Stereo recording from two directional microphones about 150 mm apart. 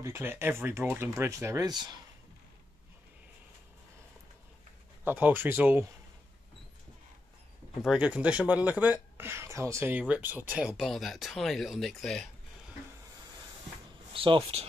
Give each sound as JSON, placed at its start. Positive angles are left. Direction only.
{"t": 0.0, "sound": "speech", "side_deg": -15}
{"t": 5.0, "sound": "speech", "side_deg": -15}
{"t": 7.8, "sound": "speech", "side_deg": -5}
{"t": 14.1, "sound": "speech", "side_deg": -35}